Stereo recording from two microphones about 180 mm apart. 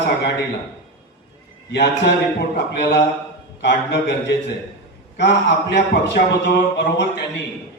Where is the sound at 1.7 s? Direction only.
65° left (ahead or behind).